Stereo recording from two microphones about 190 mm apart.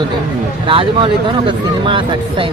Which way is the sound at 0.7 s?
25° right (ahead or behind).